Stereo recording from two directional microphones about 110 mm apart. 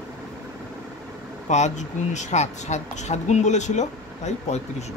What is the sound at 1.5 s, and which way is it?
Speech, 90° left.